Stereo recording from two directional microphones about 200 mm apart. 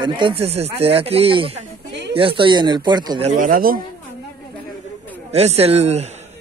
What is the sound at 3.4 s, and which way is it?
Speech, 45° right (ahead or behind).